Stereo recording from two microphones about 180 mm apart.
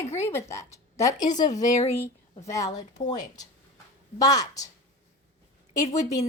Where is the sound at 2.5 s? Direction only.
20° left (ahead or behind).